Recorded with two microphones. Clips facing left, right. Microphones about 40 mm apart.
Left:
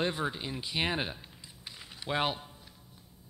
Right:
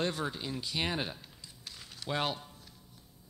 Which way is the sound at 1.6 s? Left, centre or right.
Centre.